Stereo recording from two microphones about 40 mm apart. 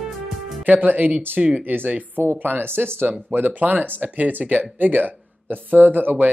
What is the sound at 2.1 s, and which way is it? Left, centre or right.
Speech, right.